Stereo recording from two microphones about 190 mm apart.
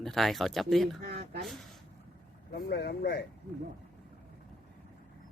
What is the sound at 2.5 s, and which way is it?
Speech, 60° left (ahead or behind).